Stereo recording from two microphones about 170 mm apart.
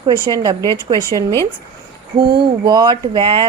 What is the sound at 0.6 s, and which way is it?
Speech, 15° left (ahead or behind).